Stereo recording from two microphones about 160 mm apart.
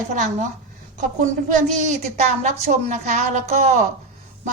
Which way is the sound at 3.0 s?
45° right (ahead or behind).